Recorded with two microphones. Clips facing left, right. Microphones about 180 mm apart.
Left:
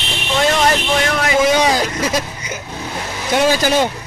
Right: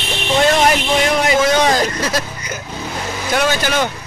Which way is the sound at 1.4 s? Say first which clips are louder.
Even; 10° left (ahead or behind).